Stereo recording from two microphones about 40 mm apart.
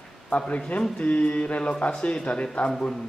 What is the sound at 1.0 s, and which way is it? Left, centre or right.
A man's voice, left.